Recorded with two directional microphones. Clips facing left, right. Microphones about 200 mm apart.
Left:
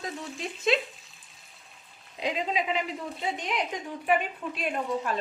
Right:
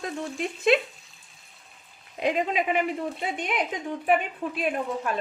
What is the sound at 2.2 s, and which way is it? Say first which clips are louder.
Speech: right 4 dB; 55° right (ahead or behind).